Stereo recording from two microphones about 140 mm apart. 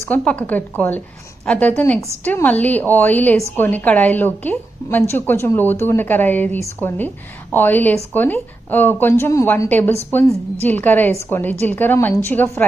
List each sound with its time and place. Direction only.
0.0 s a woman's voice: 10° left (ahead or behind)